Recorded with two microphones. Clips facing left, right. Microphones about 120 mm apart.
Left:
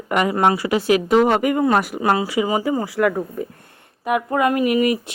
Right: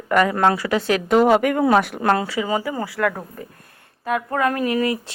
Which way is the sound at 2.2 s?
15° left (ahead or behind).